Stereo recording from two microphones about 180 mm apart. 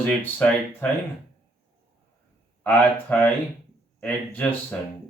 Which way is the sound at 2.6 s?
10° left (ahead or behind).